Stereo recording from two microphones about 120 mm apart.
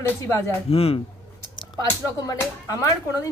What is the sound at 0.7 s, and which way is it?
Speech, 55° left (ahead or behind).